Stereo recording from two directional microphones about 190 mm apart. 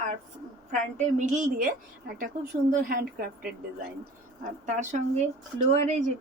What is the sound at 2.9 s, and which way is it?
Speech, 50° right (ahead or behind).